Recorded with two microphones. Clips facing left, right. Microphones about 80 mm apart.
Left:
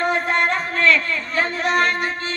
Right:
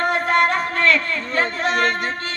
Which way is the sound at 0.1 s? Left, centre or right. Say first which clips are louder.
Right 2 dB; right.